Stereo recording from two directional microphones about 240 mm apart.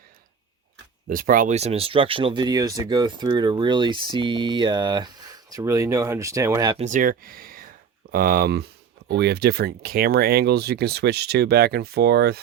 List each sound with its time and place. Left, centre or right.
1.0 s speech: right; by 6.8 s centre
6.8 s speech: right